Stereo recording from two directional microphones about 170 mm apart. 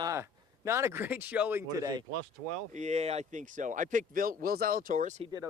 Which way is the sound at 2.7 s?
45° right (ahead or behind).